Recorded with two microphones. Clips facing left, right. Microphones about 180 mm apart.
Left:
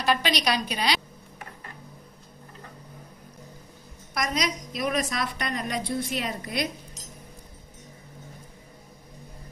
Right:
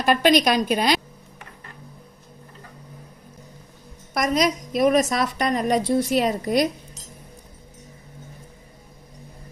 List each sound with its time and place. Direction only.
0.0 s a woman's voice: 50° right (ahead or behind)
4.1 s a woman's voice: 50° right (ahead or behind)